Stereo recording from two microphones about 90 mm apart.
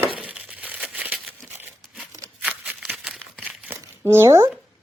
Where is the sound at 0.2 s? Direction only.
10° right (ahead or behind).